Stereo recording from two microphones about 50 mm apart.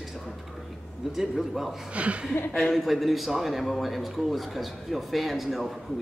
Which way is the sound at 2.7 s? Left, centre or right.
Centre.